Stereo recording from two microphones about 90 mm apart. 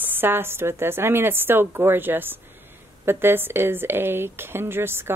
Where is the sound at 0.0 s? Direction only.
25° right (ahead or behind).